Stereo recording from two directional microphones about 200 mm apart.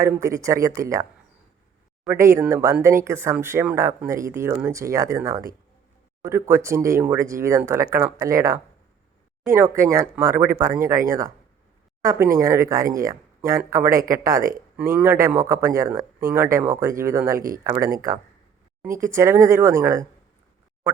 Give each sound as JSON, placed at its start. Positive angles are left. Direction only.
{"t": 0.0, "sound": "a man's voice", "side_deg": -15}
{"t": 2.0, "sound": "a man's voice", "side_deg": -15}
{"t": 12.0, "sound": "a man's voice", "side_deg": -15}